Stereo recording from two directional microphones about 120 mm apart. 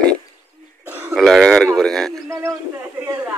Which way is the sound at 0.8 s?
15° right (ahead or behind).